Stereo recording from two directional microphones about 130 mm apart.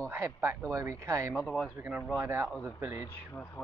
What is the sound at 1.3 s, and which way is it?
Speech, 5° left (ahead or behind).